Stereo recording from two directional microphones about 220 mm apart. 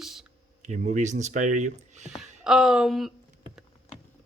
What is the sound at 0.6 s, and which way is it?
Speech, 35° right (ahead or behind).